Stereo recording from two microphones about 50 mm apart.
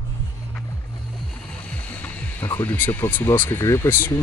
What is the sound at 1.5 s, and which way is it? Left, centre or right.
Music, left.